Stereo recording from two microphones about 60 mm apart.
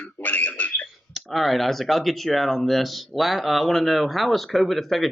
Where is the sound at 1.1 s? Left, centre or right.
Centre.